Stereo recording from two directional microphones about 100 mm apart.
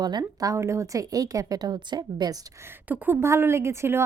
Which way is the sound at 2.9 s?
20° right (ahead or behind).